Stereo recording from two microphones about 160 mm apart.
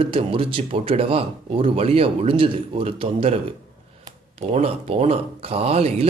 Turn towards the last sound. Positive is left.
turn(degrees=-40)  # may be behind; listen again after turning